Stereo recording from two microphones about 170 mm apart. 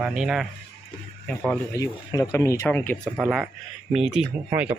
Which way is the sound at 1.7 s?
20° left (ahead or behind).